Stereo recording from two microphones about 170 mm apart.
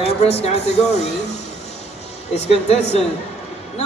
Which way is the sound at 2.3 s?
40° left (ahead or behind).